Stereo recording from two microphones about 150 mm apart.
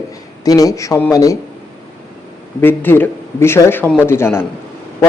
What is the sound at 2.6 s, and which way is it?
A man's voice, 15° left (ahead or behind).